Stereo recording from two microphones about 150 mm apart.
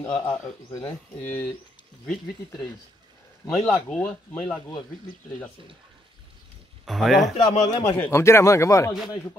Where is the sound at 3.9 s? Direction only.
10° left (ahead or behind).